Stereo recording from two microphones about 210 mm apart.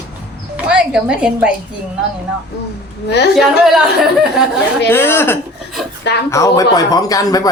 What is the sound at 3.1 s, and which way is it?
Speech, 50° left (ahead or behind).